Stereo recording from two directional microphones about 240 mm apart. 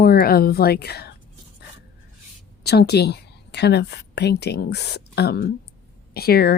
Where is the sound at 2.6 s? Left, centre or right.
Left.